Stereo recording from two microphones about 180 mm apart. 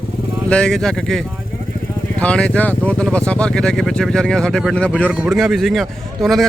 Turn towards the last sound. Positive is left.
turn(degrees=0)  # may be behind; listen again after turning